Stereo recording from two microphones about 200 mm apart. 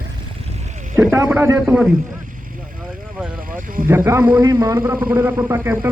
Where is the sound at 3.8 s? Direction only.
15° right (ahead or behind).